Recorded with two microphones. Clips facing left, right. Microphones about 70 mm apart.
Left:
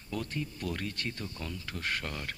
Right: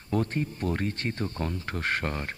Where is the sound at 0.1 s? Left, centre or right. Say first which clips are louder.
Right 8 dB; right.